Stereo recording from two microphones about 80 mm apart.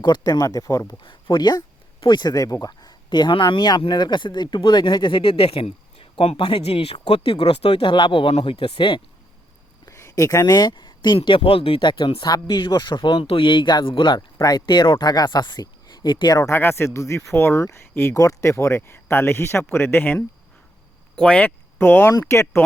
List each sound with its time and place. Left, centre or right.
0.0 s speech: left
1.0 s speech: left
9.8 s speech: left
12.5 s speech: left
14.3 s speech: left
16.0 s speech: left
16.5 s speech: left
18.1 s speech: left
21.2 s speech: centre
21.8 s speech: left